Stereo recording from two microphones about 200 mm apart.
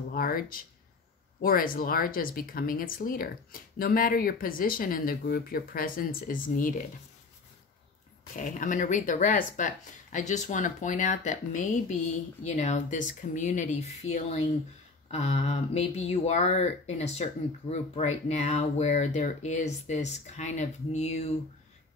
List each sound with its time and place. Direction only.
0.1 s speech: 45° left (ahead or behind)
8.4 s speech: 40° left (ahead or behind)